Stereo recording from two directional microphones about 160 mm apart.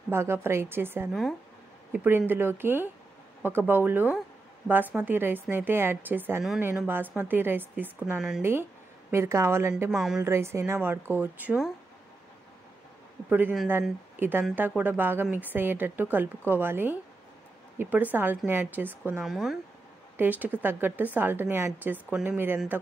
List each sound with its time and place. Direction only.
0.1 s a woman's voice: 15° right (ahead or behind)
9.8 s speech: 5° right (ahead or behind)
10.2 s a woman's voice: 15° right (ahead or behind)
13.3 s a woman's voice: 10° right (ahead or behind)
19.2 s speech: centre (ahead or behind)
20.2 s a woman's voice: 10° right (ahead or behind)